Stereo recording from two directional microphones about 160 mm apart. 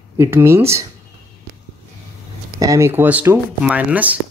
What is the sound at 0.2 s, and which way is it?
Speech, 15° right (ahead or behind).